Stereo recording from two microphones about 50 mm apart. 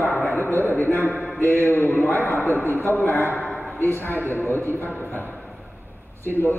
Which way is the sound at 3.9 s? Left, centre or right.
Left.